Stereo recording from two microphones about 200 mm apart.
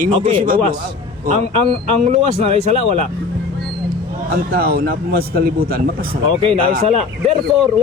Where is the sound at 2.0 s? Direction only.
30° right (ahead or behind).